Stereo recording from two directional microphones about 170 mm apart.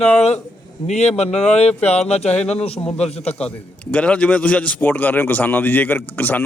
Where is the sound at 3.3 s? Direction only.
5° left (ahead or behind).